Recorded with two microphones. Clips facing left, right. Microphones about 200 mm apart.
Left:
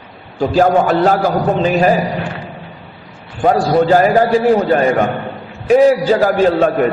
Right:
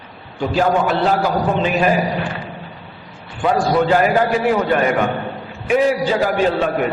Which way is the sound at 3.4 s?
40° left (ahead or behind).